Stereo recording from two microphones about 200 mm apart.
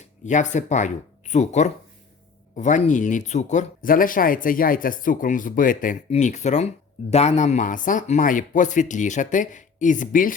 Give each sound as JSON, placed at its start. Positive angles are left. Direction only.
{"t": 0.3, "sound": "speech", "side_deg": 40}